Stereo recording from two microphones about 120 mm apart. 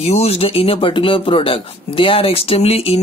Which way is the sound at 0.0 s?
65° left (ahead or behind).